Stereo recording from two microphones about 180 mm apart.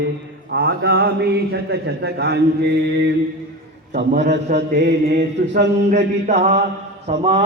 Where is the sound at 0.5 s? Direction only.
55° right (ahead or behind).